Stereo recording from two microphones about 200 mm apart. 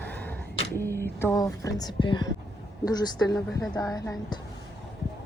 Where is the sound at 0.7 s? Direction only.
10° left (ahead or behind).